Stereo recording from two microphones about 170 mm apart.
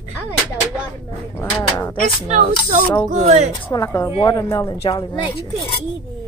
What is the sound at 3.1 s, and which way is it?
Speech, 40° right (ahead or behind).